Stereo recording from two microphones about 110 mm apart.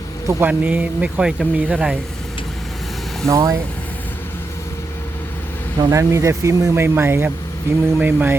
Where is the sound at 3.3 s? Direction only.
25° right (ahead or behind).